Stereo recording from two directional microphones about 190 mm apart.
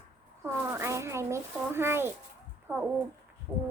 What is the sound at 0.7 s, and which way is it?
Speech, 15° right (ahead or behind).